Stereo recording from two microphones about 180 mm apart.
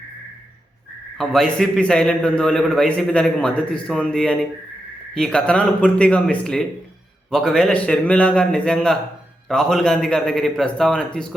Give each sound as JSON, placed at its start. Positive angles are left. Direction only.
{"t": 1.2, "sound": "a man's voice", "side_deg": 0}